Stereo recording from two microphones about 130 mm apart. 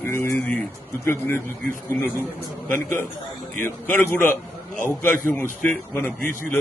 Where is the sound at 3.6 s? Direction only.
15° left (ahead or behind).